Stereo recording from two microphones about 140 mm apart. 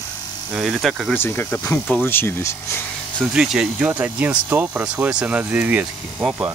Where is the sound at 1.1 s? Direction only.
15° left (ahead or behind).